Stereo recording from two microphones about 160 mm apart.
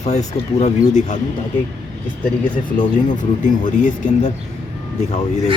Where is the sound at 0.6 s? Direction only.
50° left (ahead or behind).